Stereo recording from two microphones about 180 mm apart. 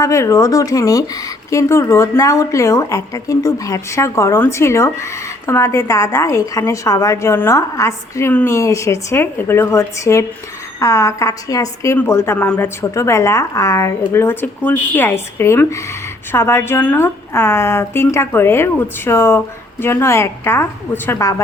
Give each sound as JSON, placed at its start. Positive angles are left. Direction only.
{"t": 0.0, "sound": "a woman's voice", "side_deg": 15}